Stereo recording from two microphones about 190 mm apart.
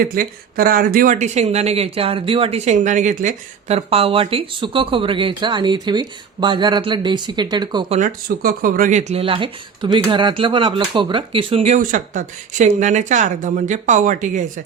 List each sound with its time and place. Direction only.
0.0 s speech: 50° right (ahead or behind); by 7.9 s 25° right (ahead or behind)
7.9 s speech: 45° right (ahead or behind)